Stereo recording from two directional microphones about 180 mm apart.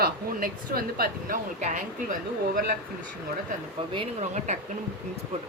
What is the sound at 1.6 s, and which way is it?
Speech, 40° right (ahead or behind).